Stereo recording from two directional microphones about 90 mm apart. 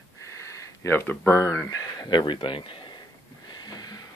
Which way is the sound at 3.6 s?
50° left (ahead or behind).